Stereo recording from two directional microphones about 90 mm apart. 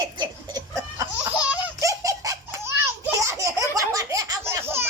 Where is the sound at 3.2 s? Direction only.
35° right (ahead or behind).